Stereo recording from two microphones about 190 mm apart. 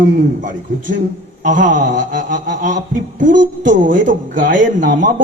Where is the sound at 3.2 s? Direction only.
45° right (ahead or behind).